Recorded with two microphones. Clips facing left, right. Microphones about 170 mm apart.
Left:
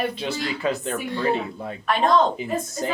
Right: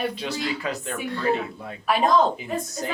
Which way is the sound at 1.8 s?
5° right (ahead or behind).